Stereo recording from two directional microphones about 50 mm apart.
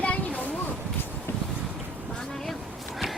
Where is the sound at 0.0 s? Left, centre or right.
Left.